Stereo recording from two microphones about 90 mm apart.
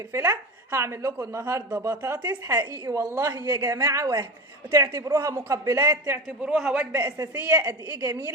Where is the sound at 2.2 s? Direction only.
35° right (ahead or behind).